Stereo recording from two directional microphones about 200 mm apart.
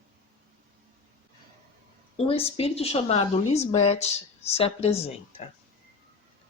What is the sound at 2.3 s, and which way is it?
A woman's voice, 30° left (ahead or behind).